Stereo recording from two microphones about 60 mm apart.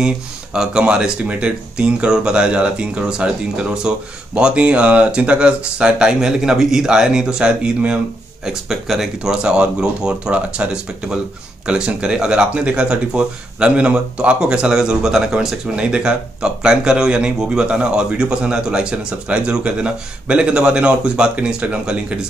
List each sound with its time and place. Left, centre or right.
0.0 s speech: centre
8.5 s speech: centre